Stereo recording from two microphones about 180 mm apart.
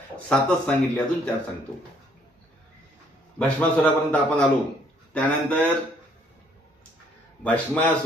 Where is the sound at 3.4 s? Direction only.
5° left (ahead or behind).